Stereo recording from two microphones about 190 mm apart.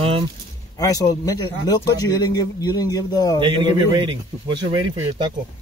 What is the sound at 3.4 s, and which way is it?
A man's voice, 25° right (ahead or behind).